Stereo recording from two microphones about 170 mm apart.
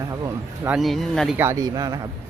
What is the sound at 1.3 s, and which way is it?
Speech, 15° right (ahead or behind).